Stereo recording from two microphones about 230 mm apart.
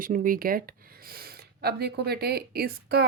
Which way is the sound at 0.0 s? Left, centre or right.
Right.